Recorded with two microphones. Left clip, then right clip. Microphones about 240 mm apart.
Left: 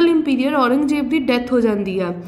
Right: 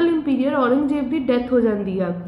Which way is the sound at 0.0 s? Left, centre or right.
Left.